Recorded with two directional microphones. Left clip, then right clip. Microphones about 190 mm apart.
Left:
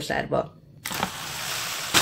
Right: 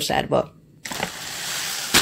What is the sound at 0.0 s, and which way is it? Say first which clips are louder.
Speech: right 5 dB; 40° right (ahead or behind).